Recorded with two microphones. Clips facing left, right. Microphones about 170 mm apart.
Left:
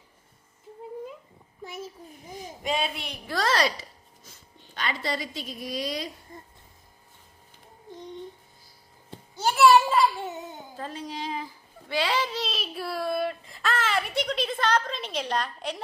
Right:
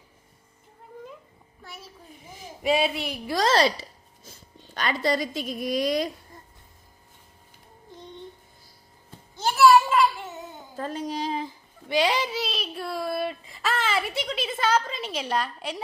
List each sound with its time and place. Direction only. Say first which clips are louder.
2.6 s speech: right 6 dB; 5° right (ahead or behind)
3.3 s speech: right 4 dB; 25° right (ahead or behind)
4.7 s a woman's voice: right 6 dB; 45° right (ahead or behind)
9.6 s a sound: right 1 dB; 30° left (ahead or behind)
10.8 s speech: right 6 dB; 45° right (ahead or behind)
11.9 s speech: right 3 dB; 15° right (ahead or behind)